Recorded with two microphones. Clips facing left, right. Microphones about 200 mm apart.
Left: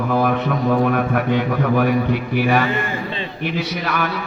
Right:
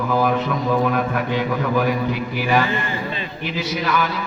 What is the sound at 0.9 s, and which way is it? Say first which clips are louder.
A man's voice: left 3 dB; 55° left (ahead or behind).